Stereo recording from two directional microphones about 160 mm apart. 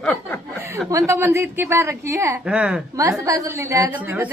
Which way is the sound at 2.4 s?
5° right (ahead or behind).